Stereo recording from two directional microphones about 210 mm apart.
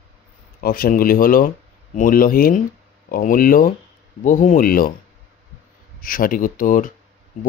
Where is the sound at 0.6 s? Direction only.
45° left (ahead or behind).